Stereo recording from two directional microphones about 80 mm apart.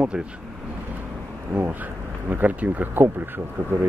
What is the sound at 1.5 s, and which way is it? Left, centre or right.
Speech, right.